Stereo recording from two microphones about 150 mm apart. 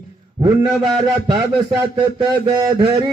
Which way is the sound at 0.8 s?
30° right (ahead or behind).